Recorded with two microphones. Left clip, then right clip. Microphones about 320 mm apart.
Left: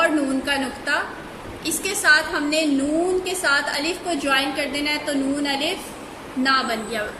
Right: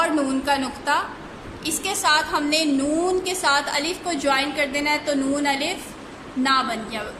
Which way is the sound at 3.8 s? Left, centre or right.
Centre.